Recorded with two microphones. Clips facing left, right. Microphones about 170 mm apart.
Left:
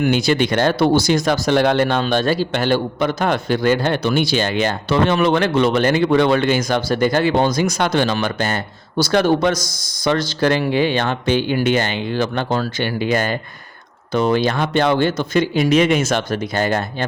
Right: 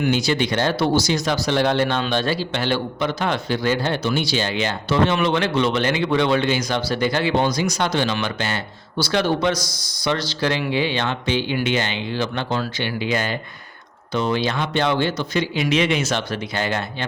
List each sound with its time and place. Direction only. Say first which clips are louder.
0.0 s speech: left 4 dB; 55° left (ahead or behind)